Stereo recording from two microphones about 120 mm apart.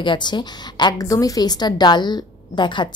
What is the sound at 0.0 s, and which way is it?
A woman's voice, 40° left (ahead or behind).